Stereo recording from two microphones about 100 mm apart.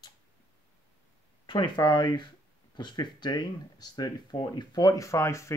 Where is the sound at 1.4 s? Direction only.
50° left (ahead or behind).